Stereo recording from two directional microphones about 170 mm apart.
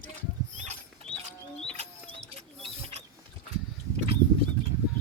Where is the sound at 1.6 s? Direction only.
35° right (ahead or behind).